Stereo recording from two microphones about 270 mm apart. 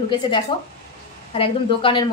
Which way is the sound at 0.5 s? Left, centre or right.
Centre.